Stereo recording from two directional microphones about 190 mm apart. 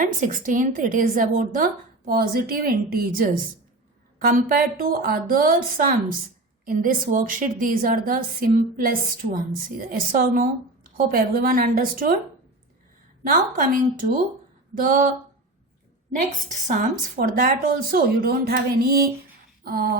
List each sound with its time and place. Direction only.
0.0 s a woman's voice: 45° right (ahead or behind)
13.2 s a woman's voice: 45° right (ahead or behind)
16.6 s a woman's voice: 45° right (ahead or behind)